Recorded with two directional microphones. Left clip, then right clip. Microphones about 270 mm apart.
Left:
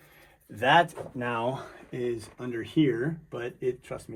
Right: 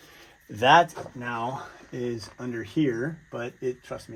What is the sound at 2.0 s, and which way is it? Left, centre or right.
Speech, centre.